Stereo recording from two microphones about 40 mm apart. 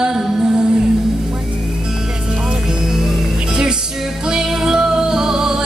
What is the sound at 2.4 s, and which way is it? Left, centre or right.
Music, centre.